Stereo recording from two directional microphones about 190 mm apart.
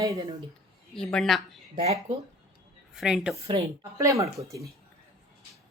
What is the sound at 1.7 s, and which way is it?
Speech, 35° right (ahead or behind).